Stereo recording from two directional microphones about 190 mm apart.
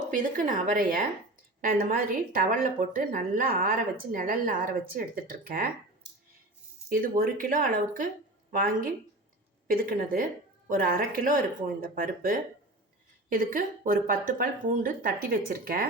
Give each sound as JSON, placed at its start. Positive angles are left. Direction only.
{"t": 0.1, "sound": "a woman's voice", "side_deg": -45}
{"t": 6.9, "sound": "a woman's voice", "side_deg": -45}